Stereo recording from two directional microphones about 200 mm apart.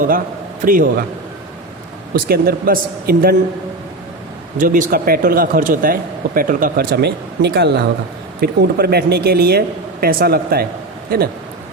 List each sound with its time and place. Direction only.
0.6 s speech: 40° right (ahead or behind)
2.1 s speech: 50° right (ahead or behind)
4.5 s speech: 40° right (ahead or behind)